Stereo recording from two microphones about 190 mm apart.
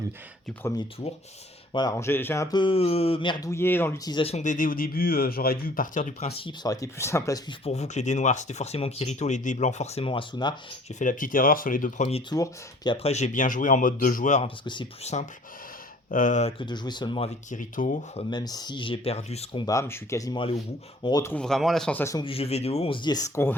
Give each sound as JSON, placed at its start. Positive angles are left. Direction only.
{"t": 1.7, "sound": "speech", "side_deg": 20}
{"t": 3.5, "sound": "speech", "side_deg": 10}
{"t": 6.6, "sound": "speech", "side_deg": 20}
{"t": 7.6, "sound": "speech", "side_deg": 35}
{"t": 11.0, "sound": "speech", "side_deg": 45}
{"t": 12.3, "sound": "speech", "side_deg": 20}
{"t": 14.6, "sound": "speech", "side_deg": 25}
{"t": 16.0, "sound": "speech", "side_deg": 45}
{"t": 16.6, "sound": "speech", "side_deg": 25}
{"t": 18.2, "sound": "speech", "side_deg": 25}
{"t": 19.6, "sound": "speech", "side_deg": 15}
{"t": 21.3, "sound": "speech", "side_deg": 0}
{"t": 22.2, "sound": "speech", "side_deg": 30}